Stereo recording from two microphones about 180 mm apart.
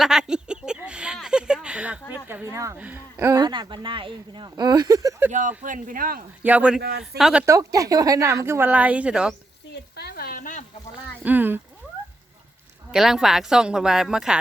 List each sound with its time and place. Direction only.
0.0 s a sound: 5° right (ahead or behind)
2.2 s speech: 10° right (ahead or behind)
5.3 s a man's voice: 45° right (ahead or behind)
6.4 s speech: 5° right (ahead or behind)
7.4 s speech: 20° right (ahead or behind)
9.7 s sizzle: 65° left (ahead or behind)
11.2 s speech: 10° right (ahead or behind)
12.9 s speech: 5° right (ahead or behind)